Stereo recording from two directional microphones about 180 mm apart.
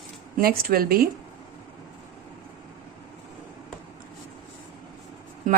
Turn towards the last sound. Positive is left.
turn(degrees=-40)  # may be behind; listen again after turning